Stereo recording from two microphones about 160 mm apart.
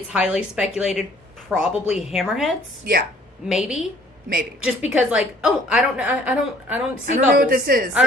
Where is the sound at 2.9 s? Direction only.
70° right (ahead or behind).